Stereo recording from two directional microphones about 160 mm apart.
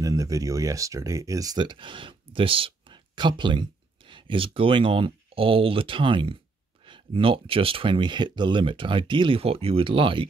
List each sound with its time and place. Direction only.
0.0 s speech: 20° right (ahead or behind)